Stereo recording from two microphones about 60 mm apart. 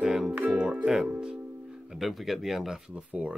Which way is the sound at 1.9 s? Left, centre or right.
Centre.